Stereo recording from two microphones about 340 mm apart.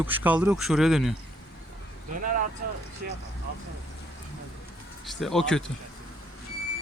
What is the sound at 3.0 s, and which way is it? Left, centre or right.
Vehicle, right.